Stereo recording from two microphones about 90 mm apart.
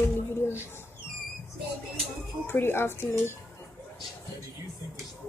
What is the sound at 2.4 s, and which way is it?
Speech, 25° left (ahead or behind).